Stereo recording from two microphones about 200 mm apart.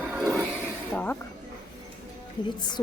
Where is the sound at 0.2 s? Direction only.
Centre (ahead or behind).